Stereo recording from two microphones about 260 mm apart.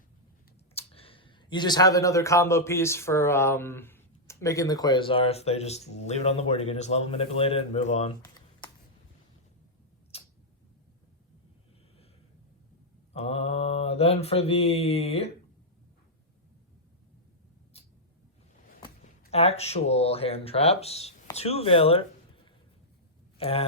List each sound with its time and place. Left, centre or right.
0.7 s speech: left
10.1 s tick-tock: left
13.1 s mantra: left
19.2 s speech: left
23.4 s speech: left